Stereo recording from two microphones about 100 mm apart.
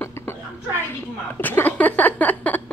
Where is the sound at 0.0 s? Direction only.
25° left (ahead or behind).